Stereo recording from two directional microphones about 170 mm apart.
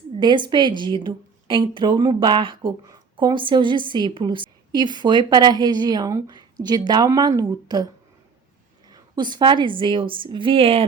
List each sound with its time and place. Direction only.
0.2 s a woman's voice: 25° right (ahead or behind)
8.9 s a woman's voice: 25° right (ahead or behind)